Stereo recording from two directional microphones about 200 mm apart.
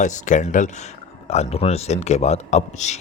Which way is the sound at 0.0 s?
40° left (ahead or behind).